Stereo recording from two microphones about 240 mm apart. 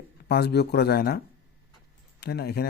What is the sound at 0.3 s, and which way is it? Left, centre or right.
Speech, left.